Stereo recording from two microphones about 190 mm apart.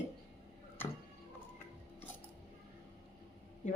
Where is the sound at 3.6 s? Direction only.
40° left (ahead or behind).